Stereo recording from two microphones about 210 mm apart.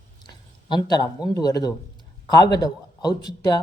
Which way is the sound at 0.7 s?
20° left (ahead or behind).